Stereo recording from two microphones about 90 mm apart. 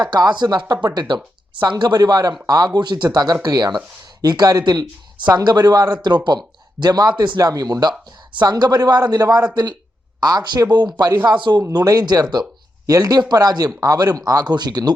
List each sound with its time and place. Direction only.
0.0 s speech: 50° right (ahead or behind)